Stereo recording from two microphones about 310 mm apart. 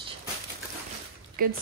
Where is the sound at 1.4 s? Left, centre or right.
Right.